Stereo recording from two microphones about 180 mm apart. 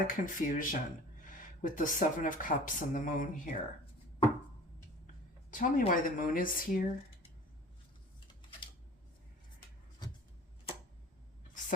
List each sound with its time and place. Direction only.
0.1 s speech: 50° left (ahead or behind)
5.5 s speech: 50° left (ahead or behind)
10.0 s a sound: 20° left (ahead or behind)